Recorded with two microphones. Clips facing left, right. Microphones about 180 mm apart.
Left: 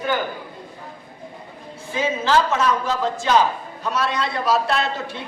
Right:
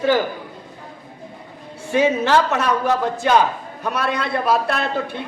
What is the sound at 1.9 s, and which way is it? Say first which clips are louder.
A man's voice: right 4 dB; 65° right (ahead or behind).